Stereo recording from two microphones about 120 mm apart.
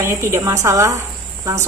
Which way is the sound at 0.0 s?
20° right (ahead or behind).